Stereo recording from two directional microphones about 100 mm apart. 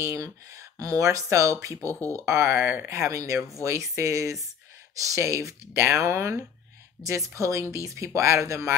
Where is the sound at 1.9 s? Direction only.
20° left (ahead or behind).